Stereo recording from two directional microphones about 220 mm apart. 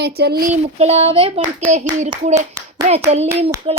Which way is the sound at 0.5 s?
30° right (ahead or behind).